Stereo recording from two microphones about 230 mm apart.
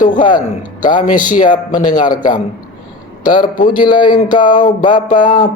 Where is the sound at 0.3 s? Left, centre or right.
Left.